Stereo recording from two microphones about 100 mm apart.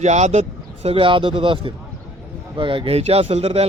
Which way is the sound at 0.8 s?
75° right (ahead or behind).